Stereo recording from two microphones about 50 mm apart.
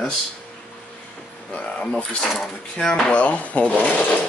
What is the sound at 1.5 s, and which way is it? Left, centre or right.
Speech, left.